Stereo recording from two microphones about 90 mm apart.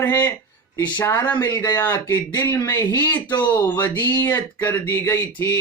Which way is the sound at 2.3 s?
25° left (ahead or behind).